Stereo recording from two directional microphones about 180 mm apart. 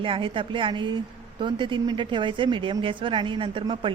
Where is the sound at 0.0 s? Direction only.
30° right (ahead or behind).